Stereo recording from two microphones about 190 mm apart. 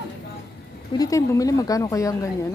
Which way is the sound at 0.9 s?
20° left (ahead or behind).